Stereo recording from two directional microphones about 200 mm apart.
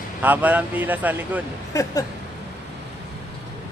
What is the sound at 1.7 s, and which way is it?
Speech, 15° left (ahead or behind).